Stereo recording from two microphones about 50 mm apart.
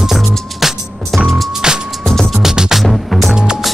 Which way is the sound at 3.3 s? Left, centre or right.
Centre.